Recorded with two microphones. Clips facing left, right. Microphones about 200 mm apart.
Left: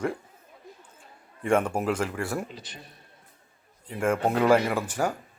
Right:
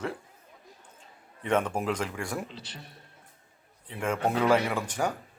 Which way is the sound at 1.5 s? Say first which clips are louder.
Left 3 dB; 10° left (ahead or behind).